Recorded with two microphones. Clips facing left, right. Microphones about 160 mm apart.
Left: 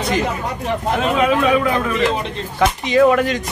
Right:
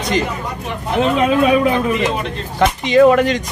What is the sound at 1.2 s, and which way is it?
Speech, 25° right (ahead or behind).